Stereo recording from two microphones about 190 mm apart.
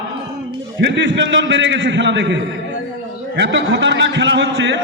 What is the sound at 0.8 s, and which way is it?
A man's voice, 70° right (ahead or behind).